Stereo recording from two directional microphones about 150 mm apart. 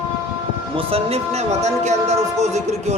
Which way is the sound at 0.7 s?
40° right (ahead or behind).